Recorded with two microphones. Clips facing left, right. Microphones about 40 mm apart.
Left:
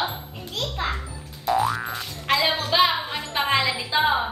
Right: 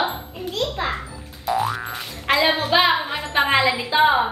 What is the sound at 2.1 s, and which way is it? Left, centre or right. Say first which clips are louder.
Music: right 3 dB; right.